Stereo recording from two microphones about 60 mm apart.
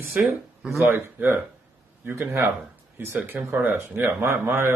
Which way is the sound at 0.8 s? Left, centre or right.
Right.